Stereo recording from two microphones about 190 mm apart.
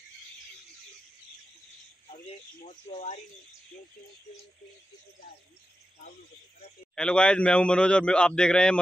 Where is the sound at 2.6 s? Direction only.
40° left (ahead or behind).